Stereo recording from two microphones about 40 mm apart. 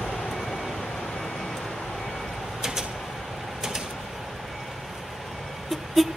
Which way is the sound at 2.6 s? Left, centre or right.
Centre.